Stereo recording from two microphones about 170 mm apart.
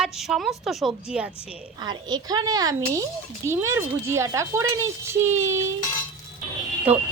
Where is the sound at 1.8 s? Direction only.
25° right (ahead or behind).